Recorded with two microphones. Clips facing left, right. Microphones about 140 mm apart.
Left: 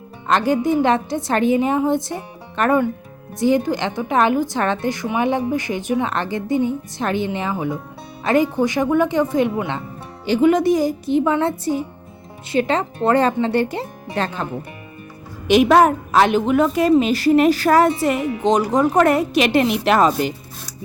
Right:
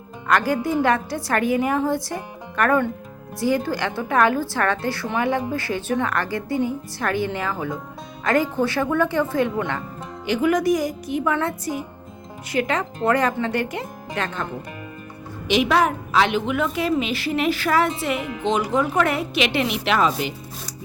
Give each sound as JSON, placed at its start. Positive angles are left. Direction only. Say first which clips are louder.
{"t": 0.3, "sound": "a woman's voice", "louder": "left 3 dB", "side_deg": 20}
{"t": 10.2, "sound": "a woman's voice", "louder": "left 4 dB", "side_deg": 30}
{"t": 15.4, "sound": "a woman's voice", "louder": "left 6 dB", "side_deg": 45}